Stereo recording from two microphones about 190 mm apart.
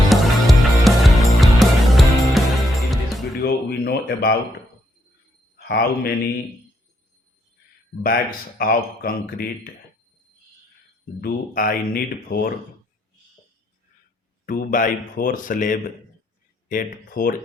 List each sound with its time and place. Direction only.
0.1 s music: centre (ahead or behind)
3.4 s a sound: 55° left (ahead or behind)
5.5 s a man's voice: 55° left (ahead or behind)
8.0 s speech: 50° left (ahead or behind)
11.2 s speech: 50° left (ahead or behind)
14.4 s speech: 45° left (ahead or behind)